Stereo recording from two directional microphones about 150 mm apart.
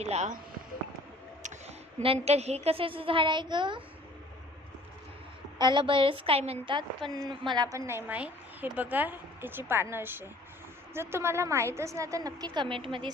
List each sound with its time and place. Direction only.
0.0 s speech: 50° right (ahead or behind)
1.4 s a sound: 55° right (ahead or behind)
2.0 s a woman's voice: 40° right (ahead or behind)
5.5 s a woman's voice: 30° right (ahead or behind)